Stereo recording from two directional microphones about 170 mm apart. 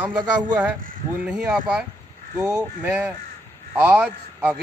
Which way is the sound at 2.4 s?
20° right (ahead or behind).